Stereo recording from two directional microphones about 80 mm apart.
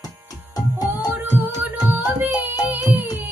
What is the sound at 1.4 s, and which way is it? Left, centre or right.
Music, right.